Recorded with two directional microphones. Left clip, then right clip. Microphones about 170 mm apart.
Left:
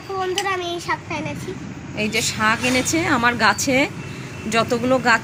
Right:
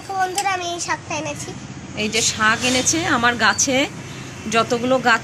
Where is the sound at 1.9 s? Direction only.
10° left (ahead or behind).